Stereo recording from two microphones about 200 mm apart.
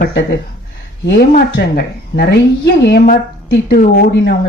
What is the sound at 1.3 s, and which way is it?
Speech, 50° left (ahead or behind).